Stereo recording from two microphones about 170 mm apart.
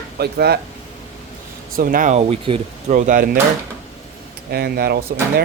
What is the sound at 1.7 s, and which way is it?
Speech, 60° right (ahead or behind).